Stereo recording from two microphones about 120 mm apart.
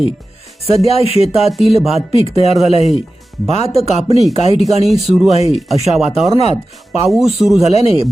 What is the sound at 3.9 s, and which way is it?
Speech, 65° right (ahead or behind).